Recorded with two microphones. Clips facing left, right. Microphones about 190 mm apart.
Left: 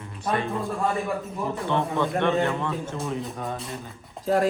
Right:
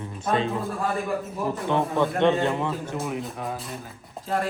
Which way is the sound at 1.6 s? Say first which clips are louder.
Right 2 dB; 15° right (ahead or behind).